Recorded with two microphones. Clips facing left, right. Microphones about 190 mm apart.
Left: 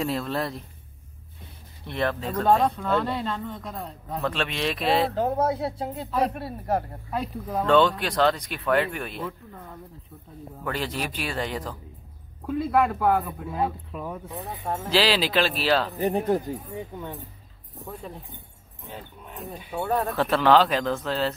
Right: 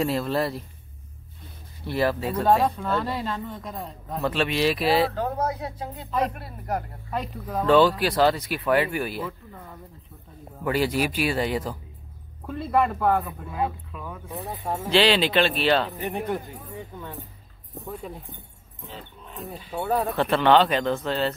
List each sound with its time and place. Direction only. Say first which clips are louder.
0.0 s speech: right 3 dB; centre (ahead or behind)
1.9 s speech: right 3 dB; 5° right (ahead or behind)
5.1 s speech: left 3 dB; 30° left (ahead or behind)
7.1 s speech: right 1 dB; 5° left (ahead or behind)
7.6 s speech: right 2 dB; 5° right (ahead or behind)
12.4 s speech: left 1 dB; 5° left (ahead or behind)
13.9 s speech: left 4 dB; 30° left (ahead or behind)
14.3 s speech: right 4 dB; 5° right (ahead or behind)
16.0 s speech: left 5 dB; 40° left (ahead or behind)
18.9 s dog: left 1 dB; 15° left (ahead or behind)
19.8 s speech: right 1 dB; centre (ahead or behind)